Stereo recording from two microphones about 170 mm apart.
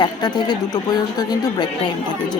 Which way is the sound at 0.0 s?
25° left (ahead or behind).